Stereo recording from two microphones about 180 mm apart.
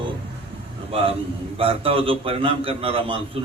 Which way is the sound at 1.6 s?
30° right (ahead or behind).